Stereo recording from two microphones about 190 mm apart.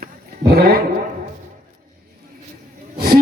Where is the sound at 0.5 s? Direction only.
55° right (ahead or behind).